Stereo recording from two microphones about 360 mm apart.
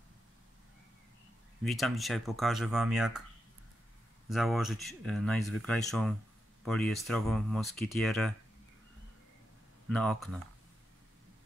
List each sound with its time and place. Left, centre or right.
1.6 s speech: centre
4.3 s speech: centre
9.8 s speech: centre